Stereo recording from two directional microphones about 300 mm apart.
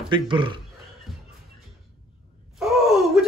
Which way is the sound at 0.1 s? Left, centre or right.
Centre.